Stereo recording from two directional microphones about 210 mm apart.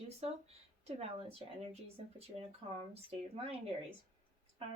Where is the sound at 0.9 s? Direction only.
30° right (ahead or behind).